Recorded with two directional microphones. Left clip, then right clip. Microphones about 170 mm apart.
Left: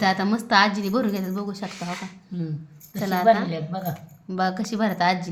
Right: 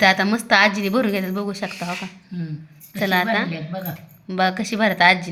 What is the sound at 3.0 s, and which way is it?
Speech, 5° right (ahead or behind).